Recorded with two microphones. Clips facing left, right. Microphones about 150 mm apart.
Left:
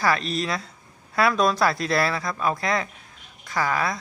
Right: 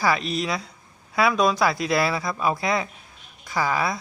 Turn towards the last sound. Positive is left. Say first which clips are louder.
# right 1 dB
turn(degrees=-5)  # may be behind; listen again after turning